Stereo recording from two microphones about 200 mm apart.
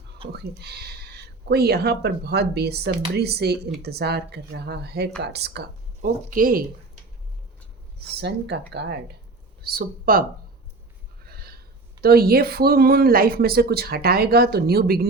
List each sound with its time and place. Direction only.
0.3 s speech: 55° right (ahead or behind)
8.1 s speech: 55° right (ahead or behind)
11.3 s snort: 50° right (ahead or behind)
12.0 s speech: 50° right (ahead or behind)